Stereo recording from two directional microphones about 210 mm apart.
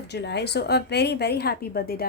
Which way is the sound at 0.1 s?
55° left (ahead or behind).